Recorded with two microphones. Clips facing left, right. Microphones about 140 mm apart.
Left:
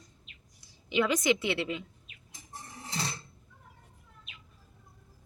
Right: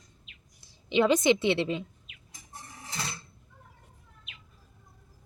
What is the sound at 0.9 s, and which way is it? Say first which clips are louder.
Speech: right 4 dB; 25° right (ahead or behind).